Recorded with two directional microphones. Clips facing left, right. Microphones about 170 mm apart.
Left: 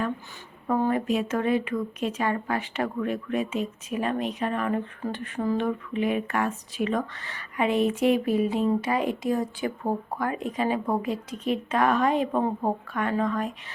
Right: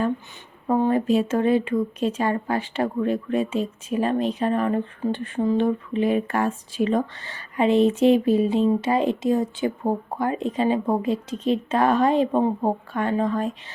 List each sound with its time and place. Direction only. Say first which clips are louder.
0.7 s speech: right 4 dB; 30° right (ahead or behind)